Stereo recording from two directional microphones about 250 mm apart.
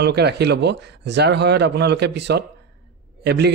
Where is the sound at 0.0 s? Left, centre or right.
Right.